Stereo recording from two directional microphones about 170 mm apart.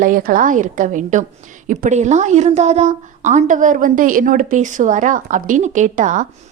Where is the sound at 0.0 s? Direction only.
55° right (ahead or behind).